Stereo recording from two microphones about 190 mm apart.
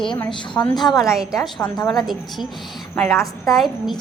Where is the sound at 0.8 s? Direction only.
Centre (ahead or behind).